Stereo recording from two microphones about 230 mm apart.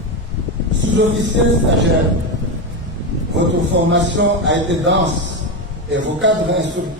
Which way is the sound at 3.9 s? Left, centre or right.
Right.